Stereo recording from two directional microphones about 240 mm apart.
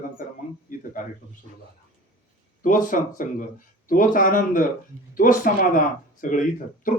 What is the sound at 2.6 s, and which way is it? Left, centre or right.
A man's voice, left.